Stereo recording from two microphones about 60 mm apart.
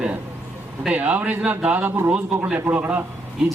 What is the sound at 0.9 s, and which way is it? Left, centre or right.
A man's voice, right.